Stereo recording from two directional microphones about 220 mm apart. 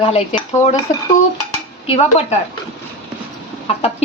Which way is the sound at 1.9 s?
30° left (ahead or behind).